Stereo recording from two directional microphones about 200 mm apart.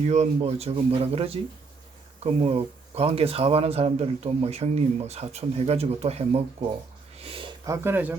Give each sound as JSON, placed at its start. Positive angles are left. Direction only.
{"t": 0.1, "sound": "speech", "side_deg": -35}